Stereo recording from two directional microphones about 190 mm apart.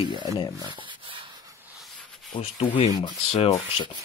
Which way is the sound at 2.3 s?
30° left (ahead or behind).